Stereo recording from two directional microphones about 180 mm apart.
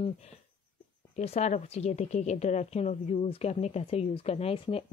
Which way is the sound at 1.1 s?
35° left (ahead or behind).